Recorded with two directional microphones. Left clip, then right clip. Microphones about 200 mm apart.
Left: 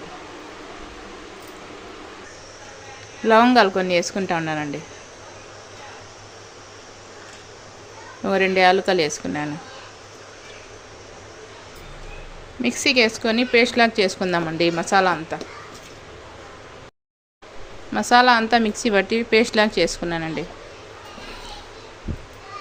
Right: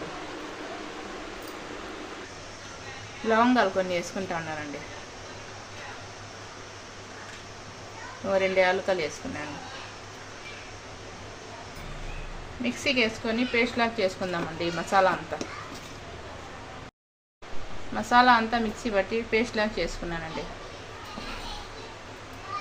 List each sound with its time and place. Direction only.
3.2 s a woman's voice: 50° left (ahead or behind)
8.3 s a woman's voice: 50° left (ahead or behind)
12.6 s speech: 55° left (ahead or behind)
17.9 s speech: 55° left (ahead or behind)